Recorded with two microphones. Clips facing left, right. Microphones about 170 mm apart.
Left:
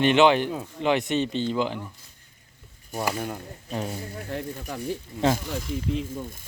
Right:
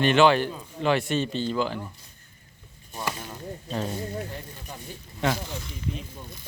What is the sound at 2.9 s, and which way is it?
Speech, 65° left (ahead or behind).